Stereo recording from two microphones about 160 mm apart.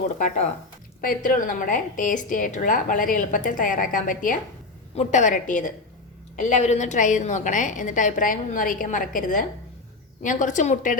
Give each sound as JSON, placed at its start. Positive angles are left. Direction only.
{"t": 0.2, "sound": "a woman's voice", "side_deg": 50}